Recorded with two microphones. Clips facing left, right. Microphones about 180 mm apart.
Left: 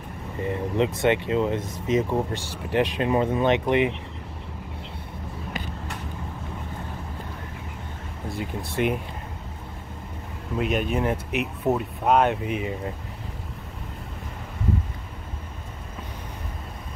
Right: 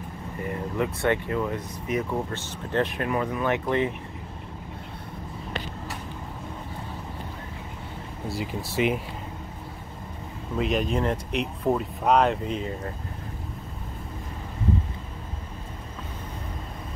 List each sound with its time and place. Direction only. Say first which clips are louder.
0.4 s speech: left 4 dB; 20° left (ahead or behind)
8.3 s speech: even; centre (ahead or behind)
10.6 s speech: even; centre (ahead or behind)